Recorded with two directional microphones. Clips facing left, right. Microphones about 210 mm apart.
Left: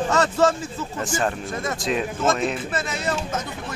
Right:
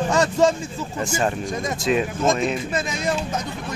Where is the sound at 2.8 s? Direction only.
15° right (ahead or behind).